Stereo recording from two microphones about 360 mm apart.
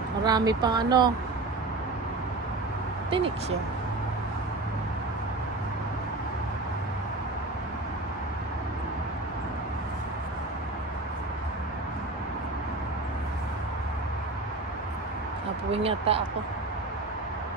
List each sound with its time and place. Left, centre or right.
0.2 s speech: centre
3.1 s speech: centre
15.7 s speech: centre